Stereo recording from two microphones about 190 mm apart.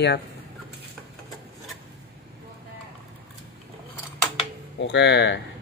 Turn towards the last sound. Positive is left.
turn(degrees=70)  # may be behind; listen again after turning